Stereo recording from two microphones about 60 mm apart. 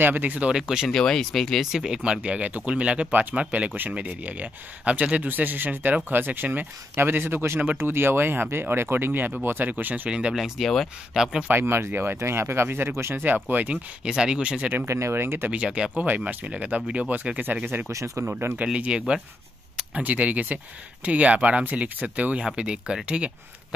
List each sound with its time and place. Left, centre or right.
0.0 s speech: right
0.5 s speech: centre
0.8 s speech: centre
1.7 s speech: centre; by 10.1 s right
10.6 s speech: centre
11.4 s speech: right
13.2 s speech: right
14.1 s speech: centre
14.9 s speech: right
15.5 s speech: right
17.9 s speech: right
18.7 s speech: centre